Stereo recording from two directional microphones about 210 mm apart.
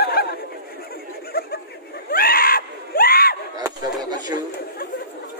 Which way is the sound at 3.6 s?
20° right (ahead or behind).